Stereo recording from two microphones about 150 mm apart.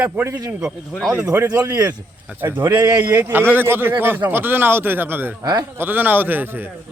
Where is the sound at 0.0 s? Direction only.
10° right (ahead or behind); by 3.0 s 25° right (ahead or behind).